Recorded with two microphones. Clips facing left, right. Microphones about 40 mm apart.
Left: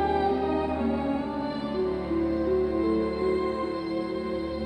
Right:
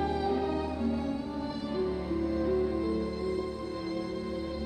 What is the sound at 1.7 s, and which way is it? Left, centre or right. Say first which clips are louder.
Music: left 4 dB; centre.